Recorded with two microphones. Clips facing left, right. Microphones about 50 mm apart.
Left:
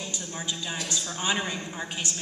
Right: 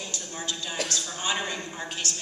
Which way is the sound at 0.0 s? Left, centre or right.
Centre.